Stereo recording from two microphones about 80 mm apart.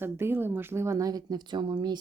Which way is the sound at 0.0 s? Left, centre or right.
Right.